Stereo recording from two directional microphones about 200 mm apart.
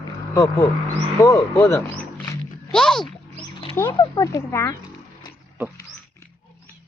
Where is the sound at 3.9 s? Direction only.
20° left (ahead or behind).